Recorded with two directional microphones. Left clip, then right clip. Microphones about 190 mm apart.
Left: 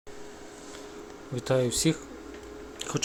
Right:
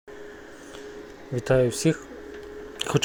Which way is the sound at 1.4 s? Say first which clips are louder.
Right 5 dB; 5° right (ahead or behind).